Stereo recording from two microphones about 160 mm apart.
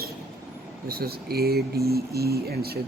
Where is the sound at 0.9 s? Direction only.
75° right (ahead or behind).